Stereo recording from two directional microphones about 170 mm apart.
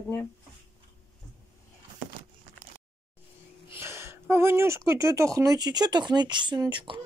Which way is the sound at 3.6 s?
15° right (ahead or behind).